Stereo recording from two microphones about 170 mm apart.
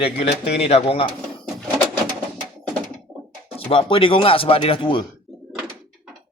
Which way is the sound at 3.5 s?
35° left (ahead or behind).